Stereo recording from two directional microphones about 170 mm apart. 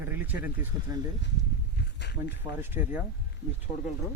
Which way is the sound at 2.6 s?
10° right (ahead or behind).